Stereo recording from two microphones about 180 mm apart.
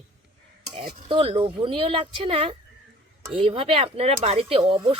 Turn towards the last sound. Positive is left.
turn(degrees=-35)  # may be behind; listen again after turning